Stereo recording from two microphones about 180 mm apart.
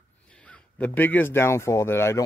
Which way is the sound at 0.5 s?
10° left (ahead or behind).